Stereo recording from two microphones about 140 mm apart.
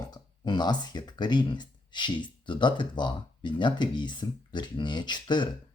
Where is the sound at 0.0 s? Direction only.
30° left (ahead or behind).